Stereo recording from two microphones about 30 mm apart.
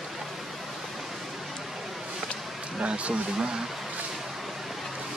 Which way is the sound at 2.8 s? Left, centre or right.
Right.